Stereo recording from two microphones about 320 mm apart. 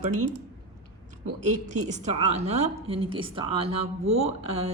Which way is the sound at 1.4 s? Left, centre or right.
Right.